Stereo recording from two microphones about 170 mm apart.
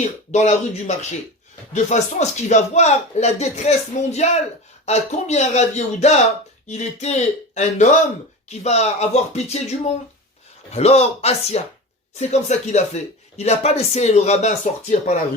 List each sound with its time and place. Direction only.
0.0 s speech: 45° left (ahead or behind)